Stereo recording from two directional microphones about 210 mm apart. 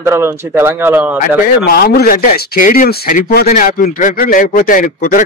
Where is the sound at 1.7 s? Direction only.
50° left (ahead or behind).